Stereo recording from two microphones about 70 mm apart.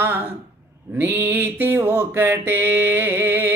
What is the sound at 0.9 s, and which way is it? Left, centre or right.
Mantra, right.